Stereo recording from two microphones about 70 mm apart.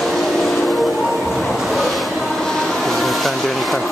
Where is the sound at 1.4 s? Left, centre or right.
Centre.